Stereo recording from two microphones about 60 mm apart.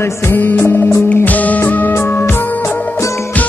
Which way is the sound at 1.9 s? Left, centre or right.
Left.